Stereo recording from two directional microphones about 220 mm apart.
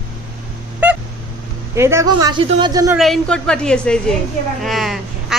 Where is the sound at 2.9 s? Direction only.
Centre (ahead or behind).